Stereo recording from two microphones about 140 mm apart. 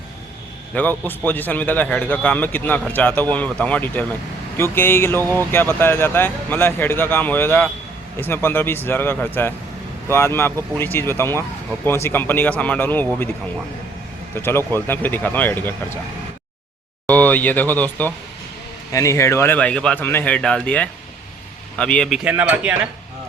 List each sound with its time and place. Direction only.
0.7 s speech: 10° left (ahead or behind)
14.3 s speech: 15° left (ahead or behind)
17.1 s speech: 10° left (ahead or behind)
18.9 s speech: 20° left (ahead or behind); by 22.2 s 5° left (ahead or behind)
22.2 s speech: 10° right (ahead or behind)